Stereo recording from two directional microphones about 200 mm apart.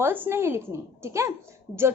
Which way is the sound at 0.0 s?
10° right (ahead or behind).